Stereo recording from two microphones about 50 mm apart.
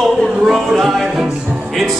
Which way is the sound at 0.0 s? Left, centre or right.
Centre.